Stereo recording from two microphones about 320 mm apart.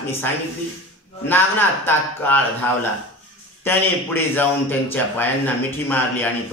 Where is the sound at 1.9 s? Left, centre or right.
Centre.